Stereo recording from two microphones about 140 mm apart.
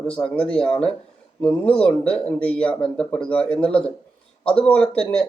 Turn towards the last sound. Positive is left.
turn(degrees=5)  # may be behind; listen again after turning